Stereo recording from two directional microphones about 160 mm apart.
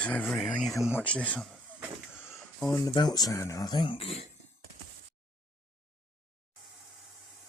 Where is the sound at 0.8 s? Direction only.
15° left (ahead or behind).